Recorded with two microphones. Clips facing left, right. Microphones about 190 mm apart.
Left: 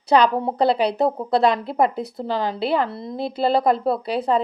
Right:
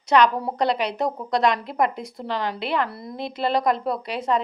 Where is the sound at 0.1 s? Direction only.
30° left (ahead or behind).